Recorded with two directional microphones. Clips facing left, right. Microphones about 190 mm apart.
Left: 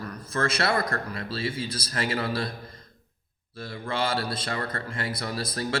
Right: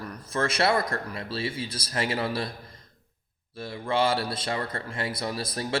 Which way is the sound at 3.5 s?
15° right (ahead or behind).